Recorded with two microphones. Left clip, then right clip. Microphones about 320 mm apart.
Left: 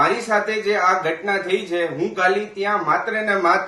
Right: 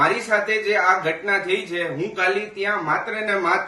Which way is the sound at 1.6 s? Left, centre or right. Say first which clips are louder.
Left 3 dB; left.